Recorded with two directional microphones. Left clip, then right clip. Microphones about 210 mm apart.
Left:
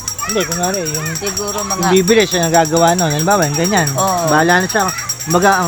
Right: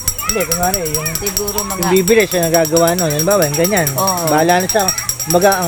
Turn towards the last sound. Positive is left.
turn(degrees=30)  # may be behind; listen again after turning